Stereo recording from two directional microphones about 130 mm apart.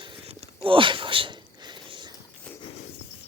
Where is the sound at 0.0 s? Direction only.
45° right (ahead or behind).